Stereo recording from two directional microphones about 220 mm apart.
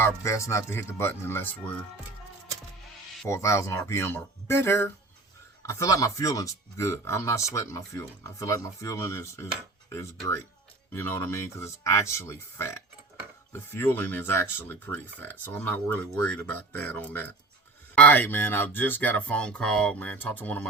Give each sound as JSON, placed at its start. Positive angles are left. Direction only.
{"t": 0.0, "sound": "speech", "side_deg": 15}
{"t": 3.2, "sound": "speech", "side_deg": 15}
{"t": 10.9, "sound": "speech", "side_deg": 10}